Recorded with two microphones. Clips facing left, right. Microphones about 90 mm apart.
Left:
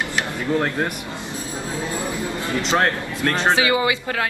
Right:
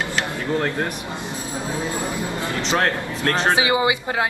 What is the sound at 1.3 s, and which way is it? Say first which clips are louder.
Speech: right 1 dB; 20° right (ahead or behind).